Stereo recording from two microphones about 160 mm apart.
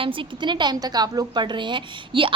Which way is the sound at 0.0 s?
35° right (ahead or behind).